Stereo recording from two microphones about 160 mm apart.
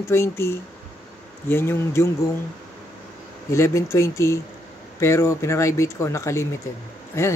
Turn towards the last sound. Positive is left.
turn(degrees=15)  # may be behind; listen again after turning